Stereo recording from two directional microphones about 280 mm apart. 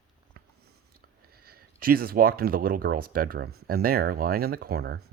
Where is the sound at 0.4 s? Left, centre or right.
Right.